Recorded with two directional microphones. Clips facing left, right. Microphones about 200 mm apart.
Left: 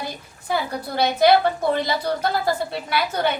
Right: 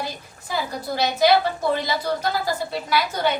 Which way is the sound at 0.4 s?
55° left (ahead or behind).